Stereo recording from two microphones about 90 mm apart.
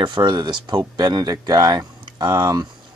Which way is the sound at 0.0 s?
60° right (ahead or behind).